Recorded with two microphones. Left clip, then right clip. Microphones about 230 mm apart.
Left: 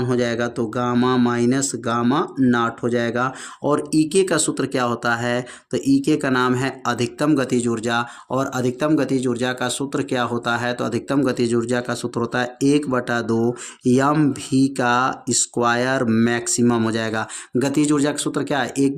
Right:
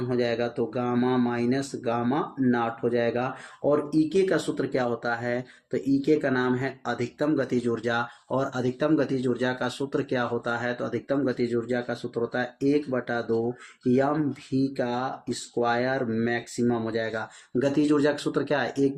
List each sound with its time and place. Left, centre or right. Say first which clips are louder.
0.1 s speech: left 2 dB; left